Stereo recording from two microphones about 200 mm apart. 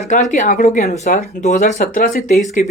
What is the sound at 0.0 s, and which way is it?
Speech, 40° left (ahead or behind).